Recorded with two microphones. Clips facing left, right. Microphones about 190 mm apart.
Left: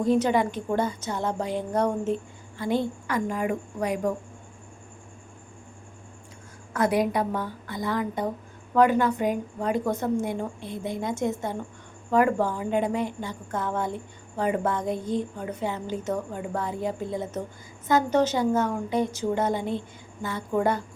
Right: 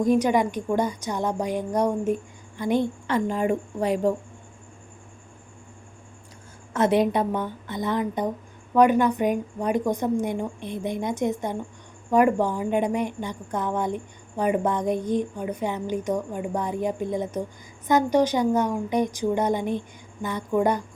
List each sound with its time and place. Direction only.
0.0 s a woman's voice: 15° right (ahead or behind)
6.7 s a woman's voice: 25° right (ahead or behind)